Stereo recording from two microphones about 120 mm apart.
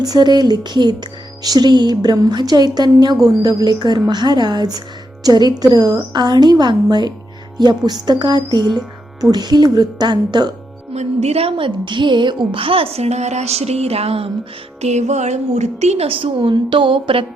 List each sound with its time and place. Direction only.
0.0 s a woman's voice: 35° right (ahead or behind)
10.9 s a woman's voice: 60° right (ahead or behind)
14.8 s a woman's voice: 70° right (ahead or behind); by 17.2 s 45° right (ahead or behind)